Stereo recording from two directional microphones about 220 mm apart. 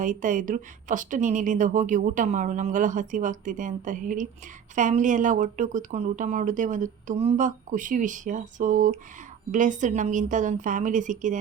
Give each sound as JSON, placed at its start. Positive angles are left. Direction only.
{"t": 0.0, "sound": "a woman's voice", "side_deg": -35}